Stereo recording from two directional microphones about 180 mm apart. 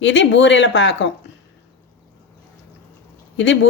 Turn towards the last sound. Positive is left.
turn(degrees=90)